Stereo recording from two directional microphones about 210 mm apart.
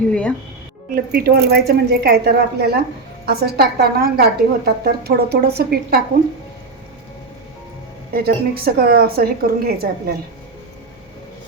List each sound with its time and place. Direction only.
0.1 s speech: 5° left (ahead or behind)
0.9 s a woman's voice: 50° right (ahead or behind)
8.1 s a woman's voice: 45° right (ahead or behind)